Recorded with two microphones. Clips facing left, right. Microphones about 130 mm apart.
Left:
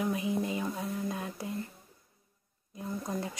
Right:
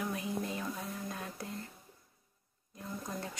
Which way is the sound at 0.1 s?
20° left (ahead or behind).